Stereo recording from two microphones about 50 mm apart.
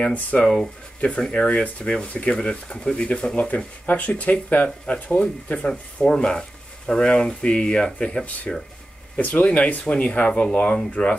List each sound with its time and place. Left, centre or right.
0.0 s speech: left
0.4 s speech: centre
1.3 s speech: left
3.3 s speech: left
5.7 s speech: centre
9.2 s speech: left